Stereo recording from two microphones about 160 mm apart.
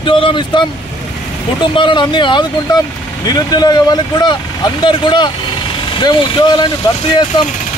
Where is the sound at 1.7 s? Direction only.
30° left (ahead or behind).